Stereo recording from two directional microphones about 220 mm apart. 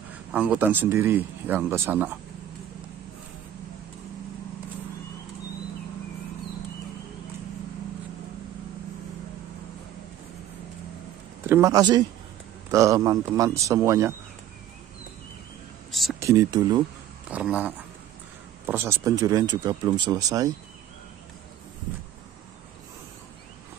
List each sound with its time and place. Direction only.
0.3 s speech: 5° right (ahead or behind)
11.4 s speech: 15° right (ahead or behind)
15.9 s a sound: centre (ahead or behind)
16.2 s speech: 15° right (ahead or behind)
17.3 s speech: 5° right (ahead or behind)